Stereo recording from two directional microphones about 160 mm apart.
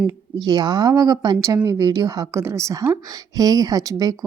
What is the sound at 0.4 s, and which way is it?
Speech, 25° right (ahead or behind).